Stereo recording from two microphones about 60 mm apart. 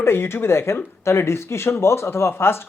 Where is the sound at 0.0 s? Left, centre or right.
Left.